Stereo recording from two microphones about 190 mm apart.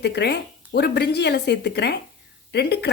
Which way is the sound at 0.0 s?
60° left (ahead or behind).